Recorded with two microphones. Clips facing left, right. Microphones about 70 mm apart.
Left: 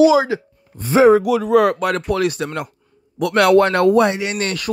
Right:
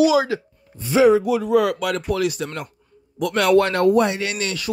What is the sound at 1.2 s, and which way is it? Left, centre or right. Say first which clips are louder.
Speech: left 3 dB; left.